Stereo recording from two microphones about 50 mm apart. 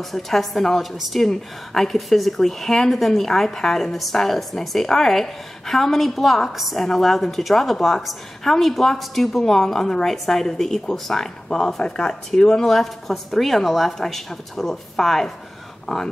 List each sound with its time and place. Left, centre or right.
0.1 s a woman's voice: centre
15.9 s speech: centre